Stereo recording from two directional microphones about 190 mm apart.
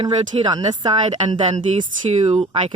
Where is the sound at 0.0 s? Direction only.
25° right (ahead or behind).